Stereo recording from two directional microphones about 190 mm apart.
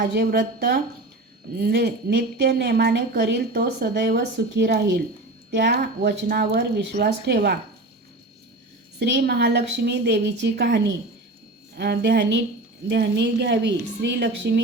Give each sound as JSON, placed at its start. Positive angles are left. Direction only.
{"t": 0.0, "sound": "a woman's voice", "side_deg": -55}
{"t": 9.0, "sound": "a woman's voice", "side_deg": -60}